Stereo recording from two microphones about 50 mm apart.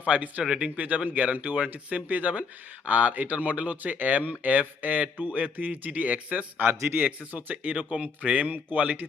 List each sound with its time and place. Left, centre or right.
0.0 s a man's voice: right
7.3 s a man's voice: right